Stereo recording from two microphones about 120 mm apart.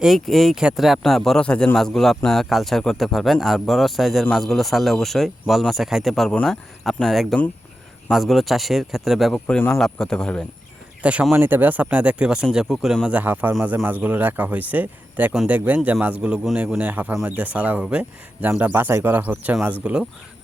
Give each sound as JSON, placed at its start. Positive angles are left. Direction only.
{"t": 0.0, "sound": "speech", "side_deg": 0}
{"t": 11.0, "sound": "speech", "side_deg": -10}